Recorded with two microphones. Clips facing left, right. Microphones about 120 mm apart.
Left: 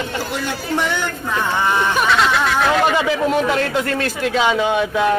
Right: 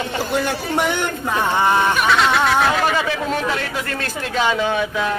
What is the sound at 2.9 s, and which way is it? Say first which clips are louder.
Speech: left 4 dB; 15° left (ahead or behind).